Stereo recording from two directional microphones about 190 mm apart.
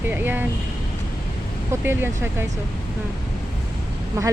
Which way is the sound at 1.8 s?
10° right (ahead or behind).